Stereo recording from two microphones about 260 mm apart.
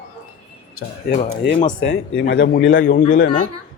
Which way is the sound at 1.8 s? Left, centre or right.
Left.